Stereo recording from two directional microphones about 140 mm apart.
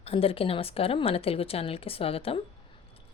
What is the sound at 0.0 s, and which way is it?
Speech, 45° left (ahead or behind).